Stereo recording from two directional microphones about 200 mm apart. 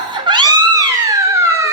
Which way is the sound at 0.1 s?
25° right (ahead or behind).